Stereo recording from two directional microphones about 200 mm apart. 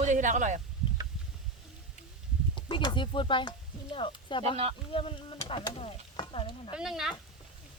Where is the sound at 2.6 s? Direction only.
20° left (ahead or behind).